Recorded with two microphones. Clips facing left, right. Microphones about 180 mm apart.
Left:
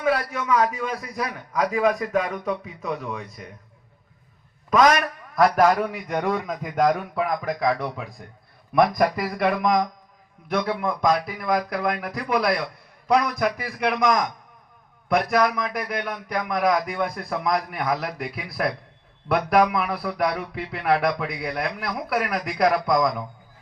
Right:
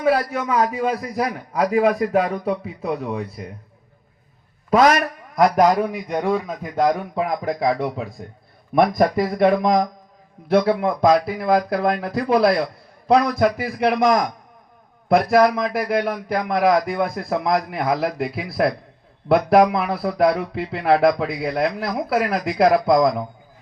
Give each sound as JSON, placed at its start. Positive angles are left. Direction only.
{"t": 0.0, "sound": "a man's voice", "side_deg": -30}
{"t": 4.7, "sound": "a man's voice", "side_deg": -30}
{"t": 5.5, "sound": "a sound", "side_deg": -10}
{"t": 7.2, "sound": "speech", "side_deg": -25}
{"t": 19.5, "sound": "speech", "side_deg": -30}